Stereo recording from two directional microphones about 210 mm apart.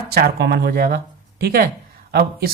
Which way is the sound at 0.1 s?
50° right (ahead or behind).